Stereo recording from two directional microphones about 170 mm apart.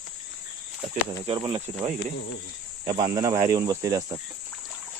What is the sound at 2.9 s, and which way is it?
Speech, 25° right (ahead or behind).